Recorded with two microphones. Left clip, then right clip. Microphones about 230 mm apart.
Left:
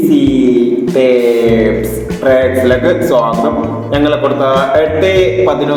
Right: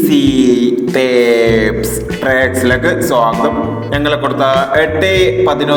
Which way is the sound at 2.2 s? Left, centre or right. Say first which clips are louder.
Left 3 dB; right.